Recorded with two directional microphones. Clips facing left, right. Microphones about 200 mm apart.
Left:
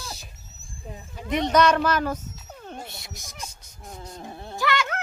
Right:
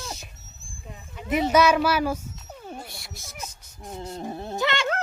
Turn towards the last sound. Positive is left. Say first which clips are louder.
# right 1 dB
turn(degrees=-25)  # may be behind; listen again after turning